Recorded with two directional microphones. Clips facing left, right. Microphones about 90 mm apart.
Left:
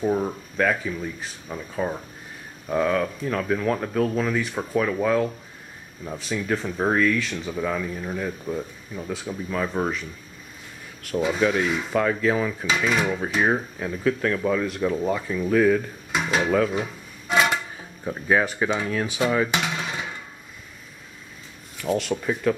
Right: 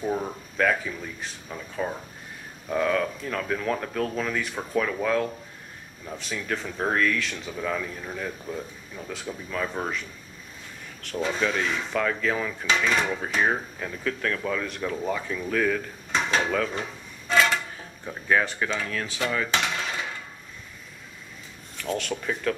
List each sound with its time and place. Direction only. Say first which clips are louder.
0.0 s speech: left 5 dB; 10° left (ahead or behind)
21.8 s speech: left 5 dB; 5° left (ahead or behind)